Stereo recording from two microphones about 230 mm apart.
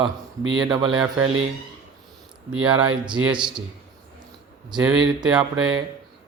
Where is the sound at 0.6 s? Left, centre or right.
Centre.